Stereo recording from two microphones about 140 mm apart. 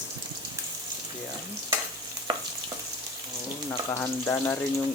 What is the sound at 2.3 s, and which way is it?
Frying, 25° right (ahead or behind).